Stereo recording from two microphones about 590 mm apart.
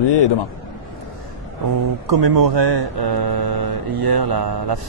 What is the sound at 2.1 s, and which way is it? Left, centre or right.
Speech, right.